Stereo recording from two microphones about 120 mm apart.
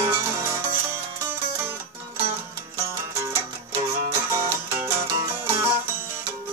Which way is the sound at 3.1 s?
20° right (ahead or behind).